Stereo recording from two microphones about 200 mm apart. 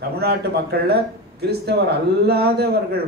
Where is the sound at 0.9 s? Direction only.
55° right (ahead or behind).